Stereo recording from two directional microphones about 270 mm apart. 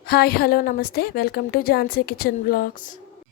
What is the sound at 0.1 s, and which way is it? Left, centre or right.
A woman's voice, left.